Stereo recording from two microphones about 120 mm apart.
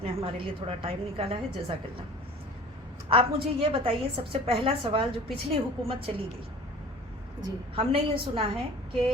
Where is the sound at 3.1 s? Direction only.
50° right (ahead or behind).